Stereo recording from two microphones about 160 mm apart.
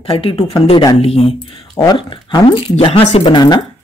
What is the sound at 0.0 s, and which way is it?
Speech, 35° left (ahead or behind).